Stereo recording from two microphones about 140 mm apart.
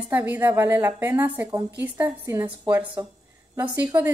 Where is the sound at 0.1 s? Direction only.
15° right (ahead or behind).